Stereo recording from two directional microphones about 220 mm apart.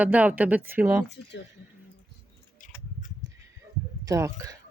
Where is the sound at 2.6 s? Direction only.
35° left (ahead or behind).